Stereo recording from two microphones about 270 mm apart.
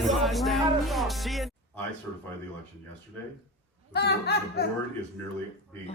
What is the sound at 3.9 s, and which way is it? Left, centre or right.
Speech, left.